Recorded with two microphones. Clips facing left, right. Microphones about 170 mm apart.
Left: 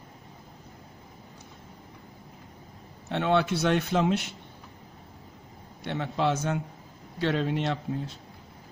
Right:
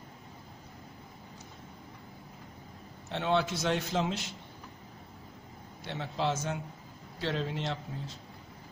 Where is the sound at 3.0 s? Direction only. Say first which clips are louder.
Left 5 dB; 60° left (ahead or behind).